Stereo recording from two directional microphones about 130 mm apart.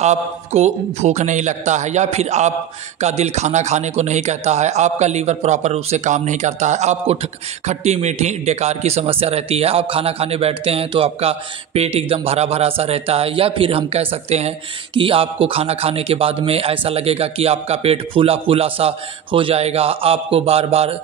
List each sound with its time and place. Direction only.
0.0 s a man's voice: 55° right (ahead or behind)